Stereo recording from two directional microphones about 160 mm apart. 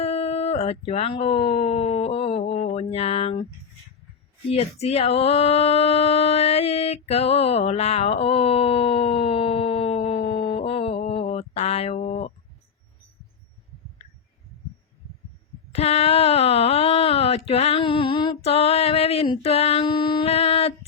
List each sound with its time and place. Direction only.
0.0 s speech: 40° left (ahead or behind)
4.5 s female singing: 40° left (ahead or behind)
15.7 s a sound: 40° left (ahead or behind)